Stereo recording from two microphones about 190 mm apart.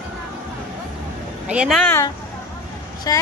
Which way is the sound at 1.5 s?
5° right (ahead or behind).